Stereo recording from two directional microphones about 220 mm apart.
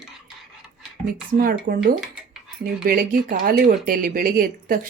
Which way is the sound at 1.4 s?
40° right (ahead or behind).